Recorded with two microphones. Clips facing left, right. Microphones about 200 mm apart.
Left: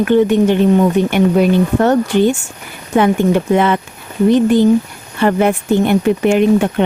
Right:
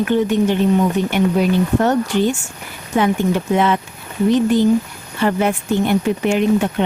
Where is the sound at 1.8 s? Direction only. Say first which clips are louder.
Left 4 dB; 60° left (ahead or behind).